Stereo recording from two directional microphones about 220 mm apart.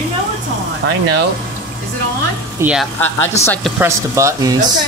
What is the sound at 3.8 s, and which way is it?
Speech, 15° right (ahead or behind).